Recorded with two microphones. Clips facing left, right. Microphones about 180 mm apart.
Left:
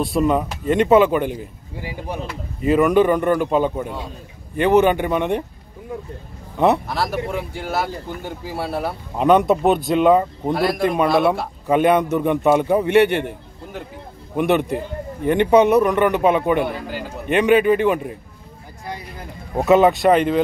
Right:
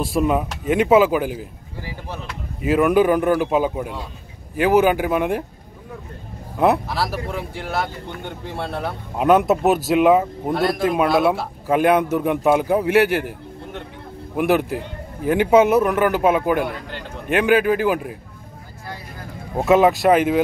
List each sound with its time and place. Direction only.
0.0 s speech: centre (ahead or behind)
1.8 s a sound: 15° left (ahead or behind)
2.2 s speech: centre (ahead or behind)
6.5 s speech: centre (ahead or behind)
14.3 s speech: centre (ahead or behind)
19.5 s speech: centre (ahead or behind)